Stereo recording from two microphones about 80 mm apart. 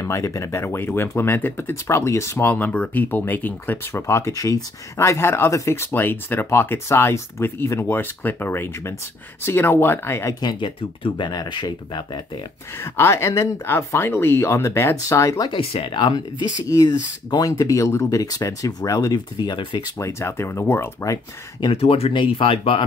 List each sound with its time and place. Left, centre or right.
0.0 s speech: left
2.5 s speech: centre; by 4.6 s left
4.9 s speech: left
10.4 s speech: left
11.5 s speech: left
12.8 s speech: left
15.4 s speech: left
16.6 s speech: left
20.0 s speech: left
21.5 s speech: left